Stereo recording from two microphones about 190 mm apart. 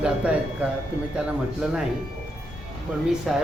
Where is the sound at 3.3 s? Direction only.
Centre (ahead or behind).